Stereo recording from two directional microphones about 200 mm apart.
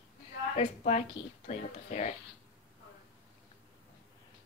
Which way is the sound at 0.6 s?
35° left (ahead or behind).